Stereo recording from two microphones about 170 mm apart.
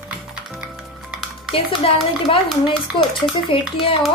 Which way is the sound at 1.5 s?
30° left (ahead or behind).